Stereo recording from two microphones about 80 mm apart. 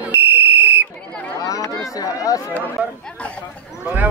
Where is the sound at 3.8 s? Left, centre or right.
Right.